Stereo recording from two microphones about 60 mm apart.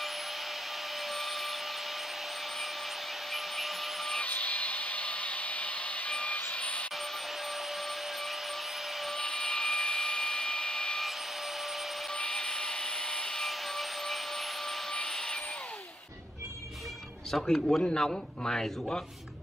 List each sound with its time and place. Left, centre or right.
1.0 s vacuum cleaner: centre
3.3 s vacuum cleaner: centre
4.2 s hair dryer: left
6.5 s vehicle: centre
9.0 s a sound: centre
12.1 s wood: centre
17.3 s speech: centre